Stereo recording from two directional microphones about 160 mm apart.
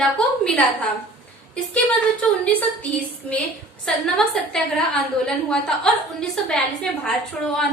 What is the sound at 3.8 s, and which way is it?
A woman's voice, 5° left (ahead or behind).